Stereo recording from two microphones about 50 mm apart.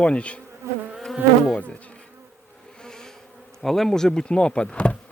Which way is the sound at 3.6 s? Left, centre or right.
Centre.